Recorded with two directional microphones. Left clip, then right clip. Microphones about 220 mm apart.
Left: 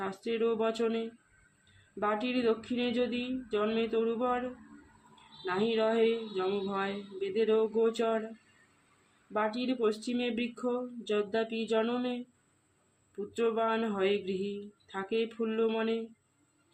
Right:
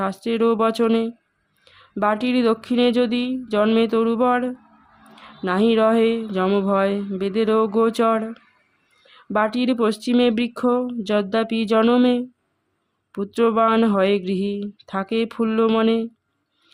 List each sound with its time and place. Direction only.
0.0 s speech: 50° right (ahead or behind)
5.5 s speech: 50° right (ahead or behind)
9.3 s speech: 50° right (ahead or behind)